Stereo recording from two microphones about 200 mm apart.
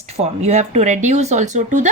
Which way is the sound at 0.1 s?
30° right (ahead or behind).